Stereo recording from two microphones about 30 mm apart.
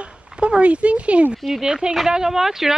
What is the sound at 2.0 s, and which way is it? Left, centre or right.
Speech, centre.